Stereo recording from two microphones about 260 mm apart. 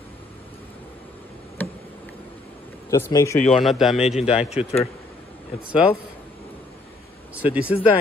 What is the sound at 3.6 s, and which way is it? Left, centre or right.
Speech, centre.